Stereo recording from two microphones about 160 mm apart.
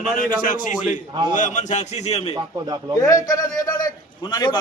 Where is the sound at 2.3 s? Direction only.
25° right (ahead or behind).